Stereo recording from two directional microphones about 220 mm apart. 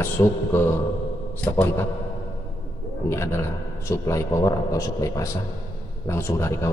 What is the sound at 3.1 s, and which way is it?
A man's voice, 10° left (ahead or behind).